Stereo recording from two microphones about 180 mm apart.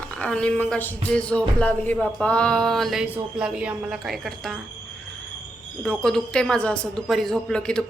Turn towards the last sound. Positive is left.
turn(degrees=5)  # may be behind; listen again after turning